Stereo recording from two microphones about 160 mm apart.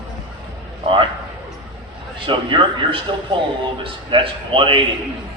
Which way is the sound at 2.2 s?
35° right (ahead or behind).